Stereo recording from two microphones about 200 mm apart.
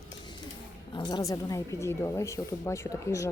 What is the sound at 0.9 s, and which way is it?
Speech, 25° left (ahead or behind).